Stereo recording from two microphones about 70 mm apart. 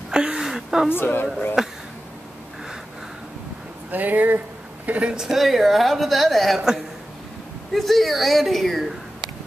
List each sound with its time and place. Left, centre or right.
0.1 s a sound: centre
0.8 s speech: left
1.6 s speech: centre
3.9 s speech: right
5.1 s a woman's voice: centre